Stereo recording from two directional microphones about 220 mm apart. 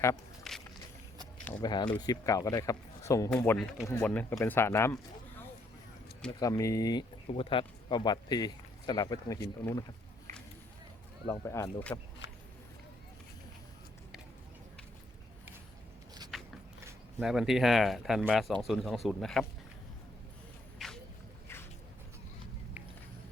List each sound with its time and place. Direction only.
0.5 s walk: centre (ahead or behind)
1.6 s a man's voice: 20° left (ahead or behind)
6.4 s speech: 15° left (ahead or behind)
11.3 s a man's voice: 15° left (ahead or behind)
16.3 s a sound: centre (ahead or behind)
16.8 s speech: 5° right (ahead or behind)
20.7 s boat: centre (ahead or behind)
21.4 s a sound: 10° left (ahead or behind)